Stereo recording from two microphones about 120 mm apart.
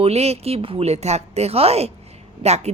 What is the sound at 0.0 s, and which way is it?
Speech, 60° right (ahead or behind).